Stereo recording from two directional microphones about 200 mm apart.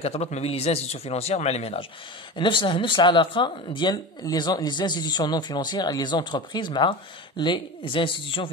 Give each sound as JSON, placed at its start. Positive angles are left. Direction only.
{"t": 0.0, "sound": "speech", "side_deg": 30}